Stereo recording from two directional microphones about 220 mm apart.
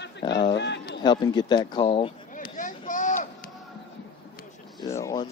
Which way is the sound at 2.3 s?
35° left (ahead or behind).